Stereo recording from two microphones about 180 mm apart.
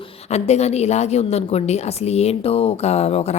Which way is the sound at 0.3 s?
35° left (ahead or behind).